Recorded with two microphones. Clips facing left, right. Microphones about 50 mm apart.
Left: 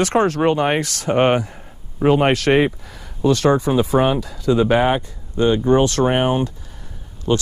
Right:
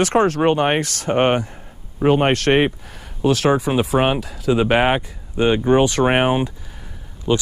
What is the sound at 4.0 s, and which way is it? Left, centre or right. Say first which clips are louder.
Speech: left 1 dB; right.